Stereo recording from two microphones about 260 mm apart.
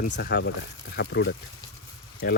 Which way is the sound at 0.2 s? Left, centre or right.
Left.